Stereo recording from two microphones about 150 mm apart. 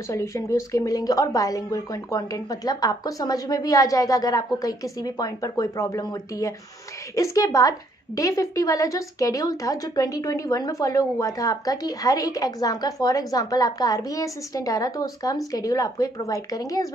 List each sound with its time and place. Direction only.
0.1 s speech: 20° left (ahead or behind)